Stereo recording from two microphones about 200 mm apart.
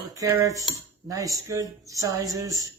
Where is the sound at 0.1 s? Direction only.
15° right (ahead or behind).